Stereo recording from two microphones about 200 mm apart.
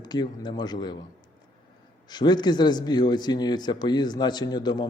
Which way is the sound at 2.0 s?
20° left (ahead or behind).